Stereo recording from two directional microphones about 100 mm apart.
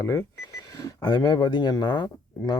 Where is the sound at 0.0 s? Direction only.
35° left (ahead or behind).